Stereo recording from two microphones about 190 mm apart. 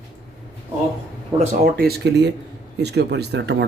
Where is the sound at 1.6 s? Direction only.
55° right (ahead or behind).